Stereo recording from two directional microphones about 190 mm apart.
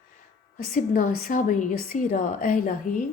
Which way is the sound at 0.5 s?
45° left (ahead or behind).